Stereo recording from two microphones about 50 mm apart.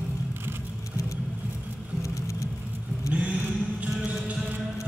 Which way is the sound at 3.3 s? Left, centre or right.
Right.